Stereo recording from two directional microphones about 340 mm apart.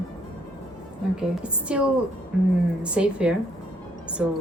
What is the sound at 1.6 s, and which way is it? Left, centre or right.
A woman's voice, centre.